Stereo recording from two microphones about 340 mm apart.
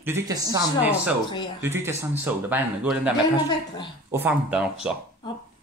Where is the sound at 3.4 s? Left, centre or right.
Centre.